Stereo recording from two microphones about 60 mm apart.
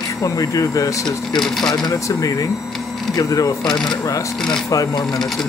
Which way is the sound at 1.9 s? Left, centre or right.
Left.